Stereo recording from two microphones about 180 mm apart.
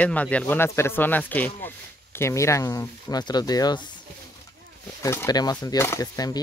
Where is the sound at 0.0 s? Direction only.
5° left (ahead or behind).